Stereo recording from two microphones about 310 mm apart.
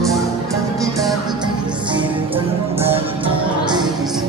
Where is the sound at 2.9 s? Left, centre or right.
Centre.